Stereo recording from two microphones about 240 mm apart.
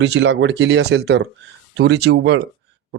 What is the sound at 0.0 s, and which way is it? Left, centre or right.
Speech, right.